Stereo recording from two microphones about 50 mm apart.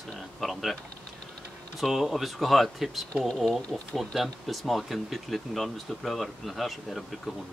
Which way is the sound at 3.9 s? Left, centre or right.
Centre.